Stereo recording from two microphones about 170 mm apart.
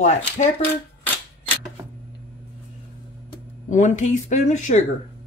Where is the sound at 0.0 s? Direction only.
40° left (ahead or behind).